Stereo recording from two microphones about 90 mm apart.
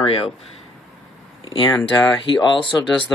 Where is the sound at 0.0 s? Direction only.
90° left.